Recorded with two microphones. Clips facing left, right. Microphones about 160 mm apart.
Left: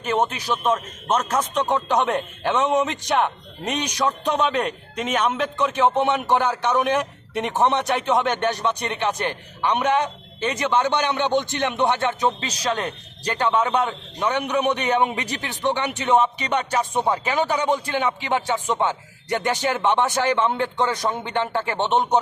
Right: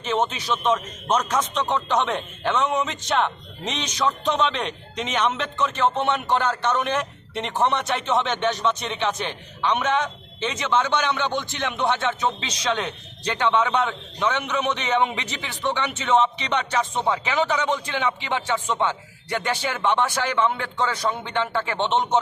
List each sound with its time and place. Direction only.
0.0 s a man's voice: 10° left (ahead or behind)